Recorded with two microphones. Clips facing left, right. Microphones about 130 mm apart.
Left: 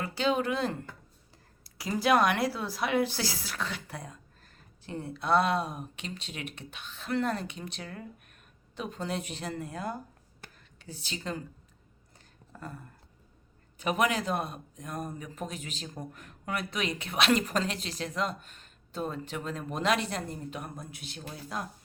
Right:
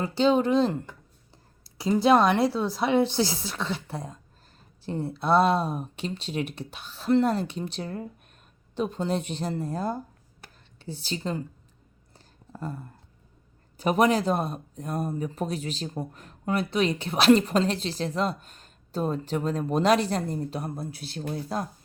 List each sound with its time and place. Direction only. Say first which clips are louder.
0.2 s a woman's voice: right 7 dB; 30° right (ahead or behind)
12.1 s a sound: right 6 dB; 30° right (ahead or behind)
13.7 s speech: right 6 dB; 35° right (ahead or behind)